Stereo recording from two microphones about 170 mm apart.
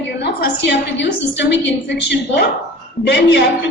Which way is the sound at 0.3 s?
85° left.